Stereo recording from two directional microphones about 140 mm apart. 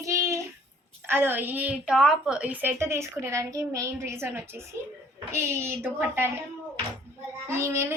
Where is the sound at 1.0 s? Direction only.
15° right (ahead or behind).